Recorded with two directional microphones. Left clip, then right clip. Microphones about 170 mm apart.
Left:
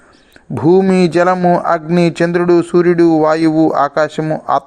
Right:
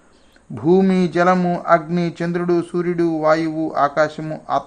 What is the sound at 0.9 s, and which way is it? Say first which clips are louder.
Speech: left 5 dB; 40° left (ahead or behind).